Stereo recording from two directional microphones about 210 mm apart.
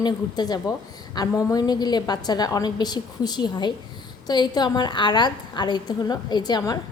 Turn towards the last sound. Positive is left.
turn(degrees=20)  # may be behind; listen again after turning